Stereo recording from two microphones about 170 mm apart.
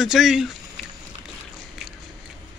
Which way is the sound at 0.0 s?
Centre (ahead or behind).